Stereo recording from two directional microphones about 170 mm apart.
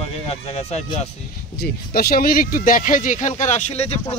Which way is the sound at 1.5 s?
65° left (ahead or behind).